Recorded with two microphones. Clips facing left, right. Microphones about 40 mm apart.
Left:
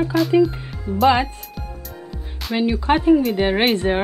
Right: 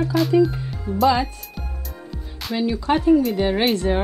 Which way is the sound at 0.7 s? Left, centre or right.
Centre.